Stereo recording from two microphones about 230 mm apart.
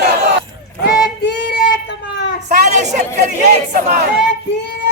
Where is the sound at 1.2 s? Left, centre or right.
Left.